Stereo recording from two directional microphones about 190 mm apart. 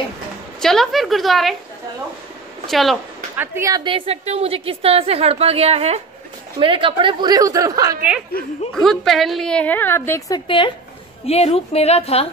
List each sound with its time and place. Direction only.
0.6 s a woman's voice: centre (ahead or behind)
2.6 s speech: centre (ahead or behind)
3.3 s a woman's voice: 15° right (ahead or behind)
8.7 s a woman's voice: centre (ahead or behind); by 12.3 s 30° left (ahead or behind)